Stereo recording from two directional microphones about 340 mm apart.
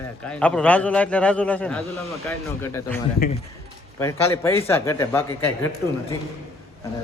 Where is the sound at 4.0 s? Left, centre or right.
Centre.